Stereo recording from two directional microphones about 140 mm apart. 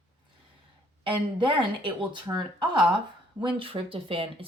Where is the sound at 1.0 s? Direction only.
35° right (ahead or behind).